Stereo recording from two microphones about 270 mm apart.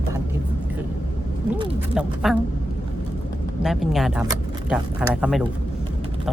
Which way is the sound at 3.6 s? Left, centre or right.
Centre.